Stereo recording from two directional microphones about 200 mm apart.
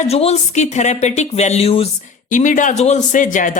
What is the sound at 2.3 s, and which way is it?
Speech, 40° left (ahead or behind).